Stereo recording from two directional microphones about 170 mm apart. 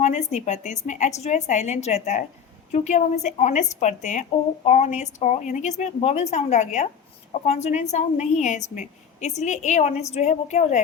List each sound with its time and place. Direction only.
0.0 s a woman's voice: 45° left (ahead or behind)